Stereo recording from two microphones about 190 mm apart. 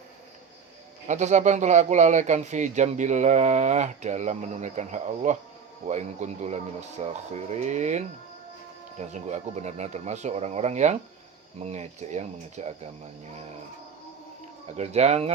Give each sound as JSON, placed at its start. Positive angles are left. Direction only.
{"t": 1.0, "sound": "speech", "side_deg": -40}
{"t": 14.8, "sound": "speech", "side_deg": -35}